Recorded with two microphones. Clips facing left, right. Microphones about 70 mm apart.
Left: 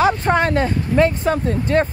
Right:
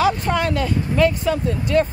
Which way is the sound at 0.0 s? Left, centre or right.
Left.